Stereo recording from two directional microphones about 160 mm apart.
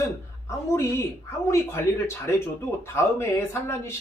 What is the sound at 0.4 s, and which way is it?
A woman's voice, 15° left (ahead or behind).